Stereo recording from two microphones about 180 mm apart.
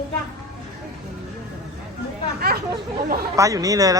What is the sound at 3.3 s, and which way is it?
Speech, 20° right (ahead or behind).